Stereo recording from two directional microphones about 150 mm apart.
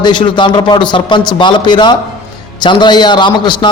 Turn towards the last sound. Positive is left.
turn(degrees=30)  # may be behind; listen again after turning